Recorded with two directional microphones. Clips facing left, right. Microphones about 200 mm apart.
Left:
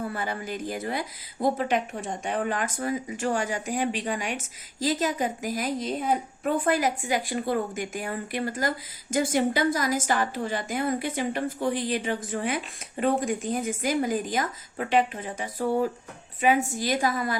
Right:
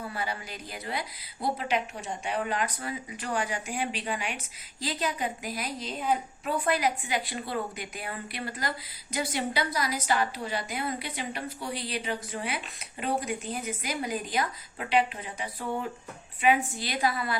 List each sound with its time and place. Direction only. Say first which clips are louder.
0.1 s speech: left 4 dB; 50° left (ahead or behind)